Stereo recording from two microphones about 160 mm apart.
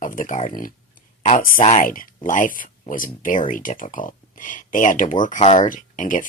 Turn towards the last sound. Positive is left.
turn(degrees=55)  # may be behind; listen again after turning